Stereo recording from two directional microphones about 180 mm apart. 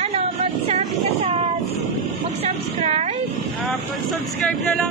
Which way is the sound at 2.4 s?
35° right (ahead or behind).